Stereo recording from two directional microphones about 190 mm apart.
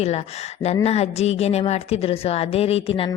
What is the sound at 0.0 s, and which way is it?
A woman's voice, 35° left (ahead or behind).